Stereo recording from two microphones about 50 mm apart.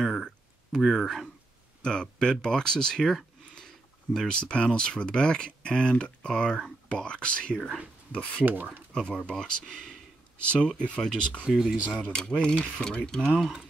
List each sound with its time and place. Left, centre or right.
0.0 s a sound: centre
1.8 s speech: centre
8.5 s speech: right
8.9 s speech: centre